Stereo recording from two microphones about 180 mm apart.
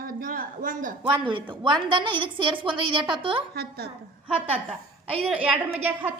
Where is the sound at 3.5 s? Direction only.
60° right (ahead or behind).